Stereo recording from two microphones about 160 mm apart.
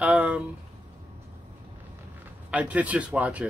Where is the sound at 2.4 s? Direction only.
10° right (ahead or behind).